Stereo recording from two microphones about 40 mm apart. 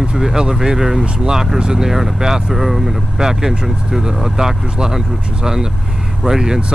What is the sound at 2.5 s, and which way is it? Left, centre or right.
Speech, centre.